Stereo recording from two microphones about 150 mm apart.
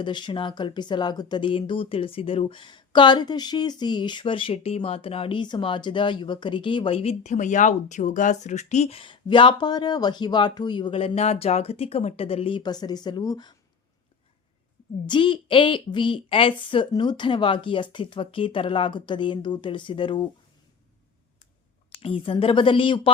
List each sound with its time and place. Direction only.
0.0 s speech: 30° left (ahead or behind)
15.0 s speech: 35° left (ahead or behind)
21.9 s speech: 35° left (ahead or behind)